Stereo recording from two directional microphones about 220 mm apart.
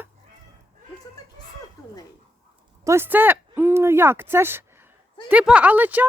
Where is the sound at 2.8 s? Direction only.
10° right (ahead or behind).